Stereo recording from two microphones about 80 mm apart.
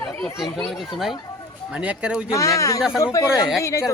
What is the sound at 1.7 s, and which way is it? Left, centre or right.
Speech, centre.